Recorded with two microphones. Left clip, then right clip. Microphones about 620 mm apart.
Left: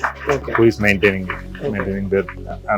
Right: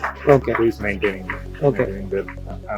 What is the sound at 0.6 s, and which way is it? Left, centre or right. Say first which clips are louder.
Speech: left 6 dB; left.